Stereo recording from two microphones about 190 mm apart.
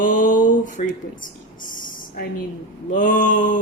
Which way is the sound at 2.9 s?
45° left (ahead or behind).